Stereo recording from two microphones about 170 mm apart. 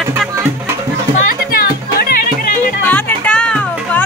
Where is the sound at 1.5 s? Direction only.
60° left (ahead or behind).